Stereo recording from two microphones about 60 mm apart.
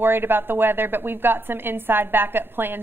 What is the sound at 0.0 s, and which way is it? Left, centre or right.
A woman's voice, right.